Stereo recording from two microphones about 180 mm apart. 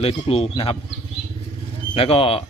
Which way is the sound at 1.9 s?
30° left (ahead or behind).